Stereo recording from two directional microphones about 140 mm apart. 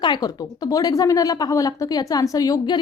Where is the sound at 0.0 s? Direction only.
30° left (ahead or behind).